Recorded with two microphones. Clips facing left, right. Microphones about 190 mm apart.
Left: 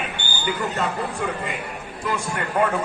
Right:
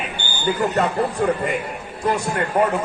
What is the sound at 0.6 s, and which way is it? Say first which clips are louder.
A man's voice: right 7 dB; 40° right (ahead or behind).